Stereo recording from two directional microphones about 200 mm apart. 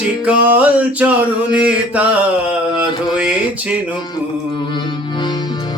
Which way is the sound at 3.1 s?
5° right (ahead or behind).